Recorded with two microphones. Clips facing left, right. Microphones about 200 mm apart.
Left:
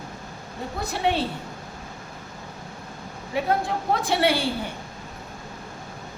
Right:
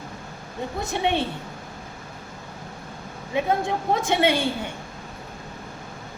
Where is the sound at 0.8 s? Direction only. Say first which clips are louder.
Even; 25° right (ahead or behind).